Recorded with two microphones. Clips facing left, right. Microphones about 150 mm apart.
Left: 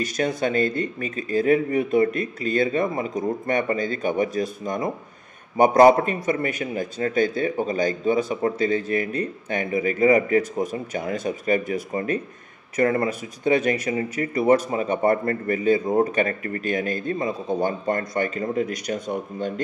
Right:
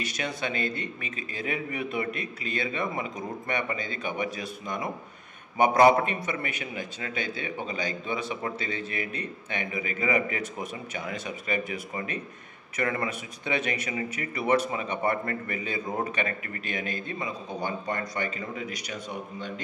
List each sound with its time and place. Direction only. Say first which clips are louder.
0.0 s a man's voice: left 9 dB; 45° left (ahead or behind)